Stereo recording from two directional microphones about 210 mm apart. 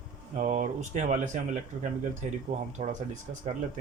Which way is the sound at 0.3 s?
35° right (ahead or behind).